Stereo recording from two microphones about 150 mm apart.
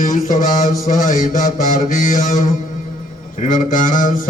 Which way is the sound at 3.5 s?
60° left (ahead or behind).